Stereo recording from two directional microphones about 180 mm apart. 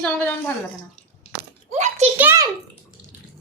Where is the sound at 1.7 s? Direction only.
40° right (ahead or behind).